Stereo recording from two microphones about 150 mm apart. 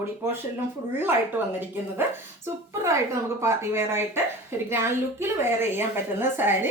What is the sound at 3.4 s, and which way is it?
A woman's voice, 15° right (ahead or behind).